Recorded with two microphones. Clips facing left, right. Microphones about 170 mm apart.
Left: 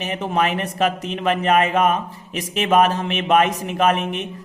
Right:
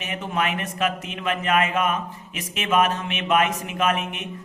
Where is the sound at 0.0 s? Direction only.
35° left (ahead or behind).